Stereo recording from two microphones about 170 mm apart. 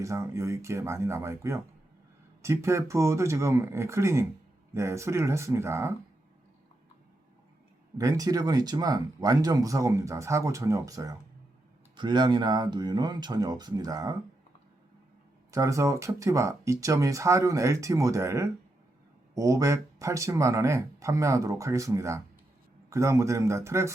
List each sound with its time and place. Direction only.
0.0 s speech: 15° right (ahead or behind)
7.9 s speech: 20° right (ahead or behind)
15.5 s speech: 20° right (ahead or behind)